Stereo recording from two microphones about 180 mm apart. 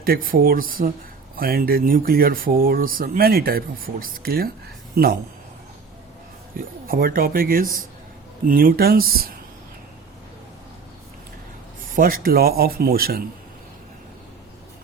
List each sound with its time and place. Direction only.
0.0 s speech: 55° right (ahead or behind)
6.8 s speech: 55° right (ahead or behind)
11.9 s speech: 50° right (ahead or behind)